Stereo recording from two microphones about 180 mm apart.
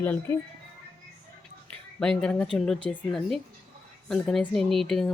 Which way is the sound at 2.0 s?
5° left (ahead or behind).